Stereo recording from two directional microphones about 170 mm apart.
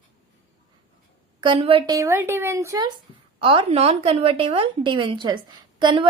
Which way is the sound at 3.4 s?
35° right (ahead or behind).